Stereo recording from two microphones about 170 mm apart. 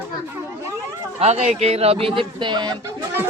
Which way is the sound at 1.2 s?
40° right (ahead or behind).